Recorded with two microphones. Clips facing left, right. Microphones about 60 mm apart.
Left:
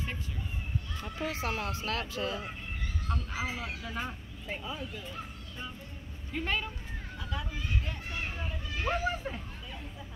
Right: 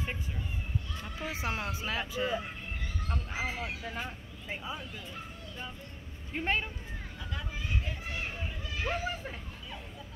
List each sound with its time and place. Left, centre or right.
1.2 s speech: centre
4.5 s speech: centre
6.3 s speech: right
8.7 s speech: centre